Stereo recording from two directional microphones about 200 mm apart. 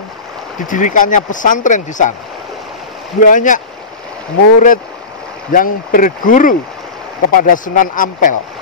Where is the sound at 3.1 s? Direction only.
40° left (ahead or behind).